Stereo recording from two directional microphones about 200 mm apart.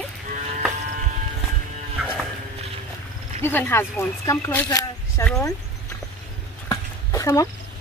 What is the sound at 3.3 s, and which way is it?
A woman's voice, 10° left (ahead or behind).